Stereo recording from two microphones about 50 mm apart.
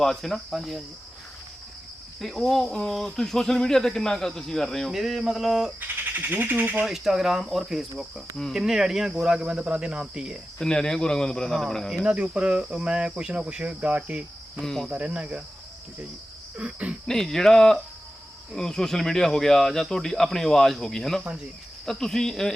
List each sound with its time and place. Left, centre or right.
0.0 s speech: centre
2.2 s speech: centre
4.9 s cricket: centre
5.8 s speech: right
6.8 s cricket: centre
10.6 s speech: centre
12.0 s cricket: centre
14.6 s speech: centre
14.8 s cricket: right
16.6 s cricket: right
17.1 s speech: centre